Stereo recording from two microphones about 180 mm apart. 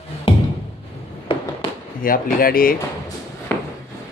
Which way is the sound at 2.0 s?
50° left (ahead or behind).